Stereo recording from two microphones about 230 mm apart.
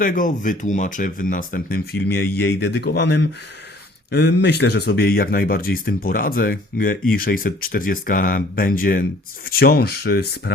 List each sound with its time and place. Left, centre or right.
0.0 s speech: left